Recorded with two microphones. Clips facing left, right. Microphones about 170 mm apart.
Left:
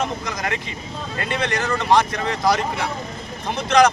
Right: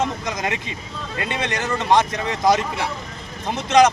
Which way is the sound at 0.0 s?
20° right (ahead or behind).